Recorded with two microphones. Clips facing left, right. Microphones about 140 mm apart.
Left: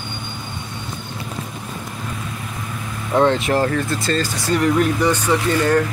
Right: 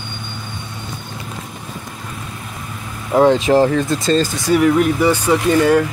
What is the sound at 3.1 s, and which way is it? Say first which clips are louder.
Speech: right 4 dB; 10° right (ahead or behind).